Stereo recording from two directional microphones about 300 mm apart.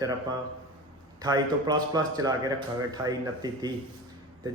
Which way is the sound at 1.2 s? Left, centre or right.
Centre.